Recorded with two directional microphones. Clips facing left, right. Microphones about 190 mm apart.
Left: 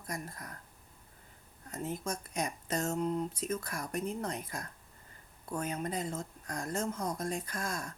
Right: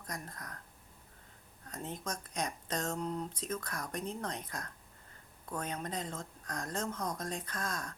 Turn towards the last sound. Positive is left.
turn(degrees=10)  # may be behind; listen again after turning